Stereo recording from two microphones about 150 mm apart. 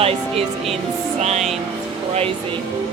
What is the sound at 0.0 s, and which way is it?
Speech, 40° right (ahead or behind).